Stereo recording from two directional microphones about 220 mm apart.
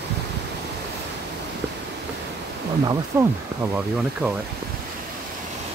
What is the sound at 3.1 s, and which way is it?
Speech, 10° right (ahead or behind).